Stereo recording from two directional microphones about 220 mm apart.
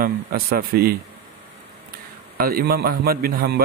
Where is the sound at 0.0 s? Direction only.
40° right (ahead or behind).